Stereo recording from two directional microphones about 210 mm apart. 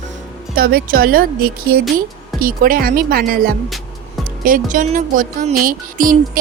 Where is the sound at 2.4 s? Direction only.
45° right (ahead or behind).